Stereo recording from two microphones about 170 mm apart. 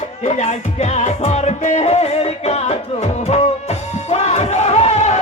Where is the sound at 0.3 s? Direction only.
45° left (ahead or behind).